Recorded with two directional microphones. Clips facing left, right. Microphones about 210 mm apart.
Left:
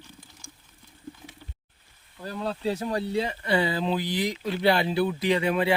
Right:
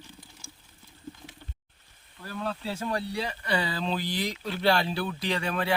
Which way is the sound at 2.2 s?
20° left (ahead or behind).